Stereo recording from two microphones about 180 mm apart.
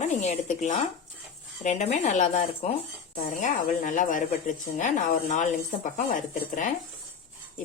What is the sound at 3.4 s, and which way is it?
A woman's voice, 45° left (ahead or behind).